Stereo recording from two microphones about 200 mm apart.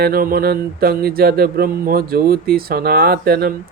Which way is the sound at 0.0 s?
45° right (ahead or behind).